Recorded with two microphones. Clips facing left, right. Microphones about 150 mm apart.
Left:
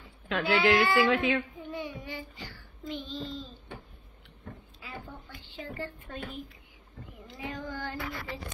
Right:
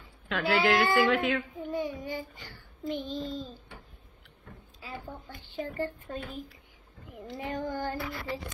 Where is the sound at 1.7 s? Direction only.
45° right (ahead or behind).